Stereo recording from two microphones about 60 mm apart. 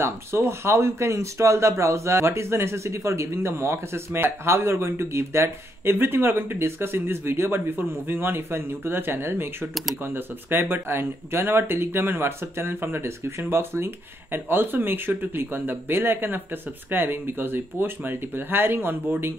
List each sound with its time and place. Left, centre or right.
0.0 s speech: right